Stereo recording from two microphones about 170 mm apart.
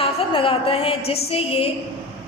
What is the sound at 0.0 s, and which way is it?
A woman's voice, 30° left (ahead or behind).